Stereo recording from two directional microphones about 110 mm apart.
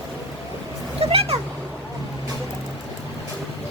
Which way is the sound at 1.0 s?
65° right (ahead or behind).